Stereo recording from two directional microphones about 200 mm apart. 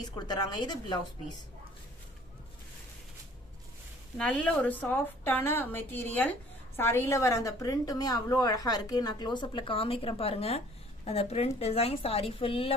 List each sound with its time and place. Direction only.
0.0 s a woman's voice: 20° left (ahead or behind)
4.2 s a woman's voice: 5° left (ahead or behind); by 12.7 s 25° left (ahead or behind)